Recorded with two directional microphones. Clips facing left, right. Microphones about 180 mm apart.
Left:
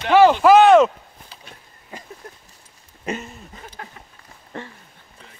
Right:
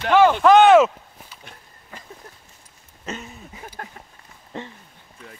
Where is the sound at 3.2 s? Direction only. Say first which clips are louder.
Even; 5° right (ahead or behind).